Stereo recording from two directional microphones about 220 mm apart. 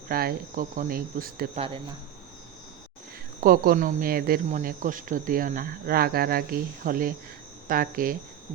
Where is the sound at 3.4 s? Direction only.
40° right (ahead or behind).